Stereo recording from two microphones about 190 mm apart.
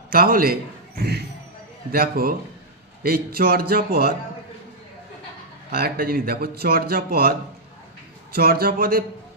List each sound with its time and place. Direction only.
0.1 s speech: 50° right (ahead or behind)
5.7 s speech: 50° right (ahead or behind)